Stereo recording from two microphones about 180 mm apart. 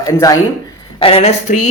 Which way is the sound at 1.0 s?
35° left (ahead or behind).